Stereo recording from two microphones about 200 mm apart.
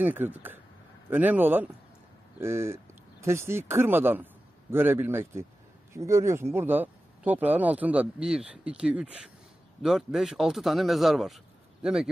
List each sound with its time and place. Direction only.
0.0 s speech: 10° right (ahead or behind)